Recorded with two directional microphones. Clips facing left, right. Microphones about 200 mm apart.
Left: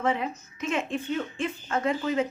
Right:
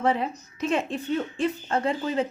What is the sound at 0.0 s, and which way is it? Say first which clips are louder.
A woman's voice: right 3 dB; 35° right (ahead or behind).